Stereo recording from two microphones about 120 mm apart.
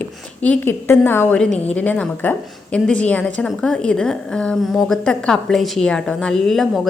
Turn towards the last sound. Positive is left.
turn(degrees=0)  # may be behind; listen again after turning